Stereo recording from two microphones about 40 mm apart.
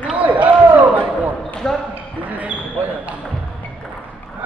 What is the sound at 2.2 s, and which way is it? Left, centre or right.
Basketball bounce, right.